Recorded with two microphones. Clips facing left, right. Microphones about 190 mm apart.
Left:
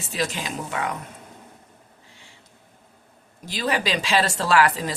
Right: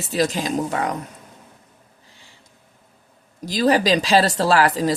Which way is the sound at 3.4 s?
35° right (ahead or behind).